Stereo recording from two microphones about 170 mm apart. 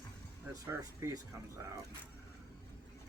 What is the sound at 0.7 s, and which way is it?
Speech, 15° right (ahead or behind).